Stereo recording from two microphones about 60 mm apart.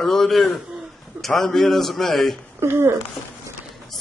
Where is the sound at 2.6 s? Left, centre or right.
Right.